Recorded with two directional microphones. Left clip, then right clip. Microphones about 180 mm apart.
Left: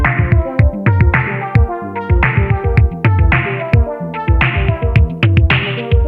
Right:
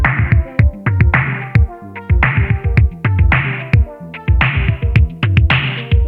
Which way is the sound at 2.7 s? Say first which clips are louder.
Left 3 dB; centre (ahead or behind).